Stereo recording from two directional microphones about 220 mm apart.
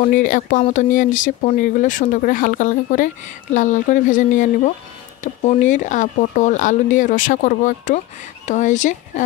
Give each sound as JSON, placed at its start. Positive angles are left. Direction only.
{"t": 0.0, "sound": "speech", "side_deg": 35}